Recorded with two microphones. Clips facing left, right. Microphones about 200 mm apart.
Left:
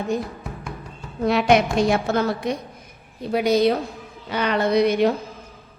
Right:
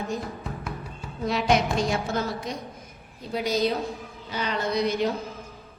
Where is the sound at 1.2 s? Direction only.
65° left (ahead or behind).